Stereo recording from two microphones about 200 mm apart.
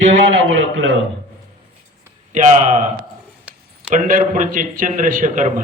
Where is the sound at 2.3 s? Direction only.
40° right (ahead or behind).